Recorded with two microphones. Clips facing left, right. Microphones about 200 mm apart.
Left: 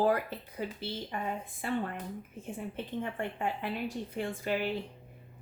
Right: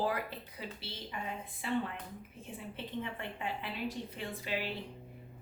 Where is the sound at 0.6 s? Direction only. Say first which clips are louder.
Left 9 dB; 50° left (ahead or behind).